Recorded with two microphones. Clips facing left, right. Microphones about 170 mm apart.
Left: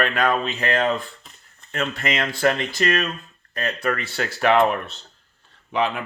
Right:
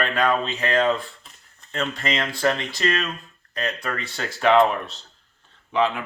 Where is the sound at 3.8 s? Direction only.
5° left (ahead or behind).